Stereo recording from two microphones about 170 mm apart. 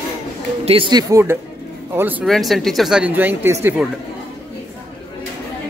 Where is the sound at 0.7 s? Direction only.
30° right (ahead or behind); by 2.2 s 10° right (ahead or behind).